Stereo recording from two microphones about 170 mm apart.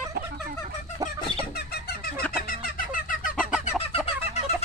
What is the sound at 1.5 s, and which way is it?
Chicken, 65° left (ahead or behind).